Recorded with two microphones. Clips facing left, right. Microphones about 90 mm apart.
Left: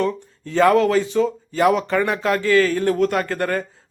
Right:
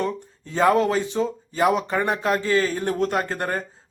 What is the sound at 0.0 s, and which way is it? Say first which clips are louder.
Speech: left 4 dB; 20° right (ahead or behind).